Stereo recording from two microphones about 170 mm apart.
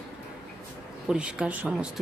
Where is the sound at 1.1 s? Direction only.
5° right (ahead or behind).